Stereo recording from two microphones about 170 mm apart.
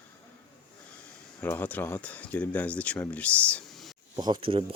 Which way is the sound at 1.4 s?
10° left (ahead or behind).